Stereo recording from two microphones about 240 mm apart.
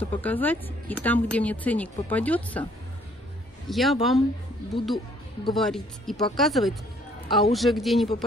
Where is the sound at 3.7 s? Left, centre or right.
Centre.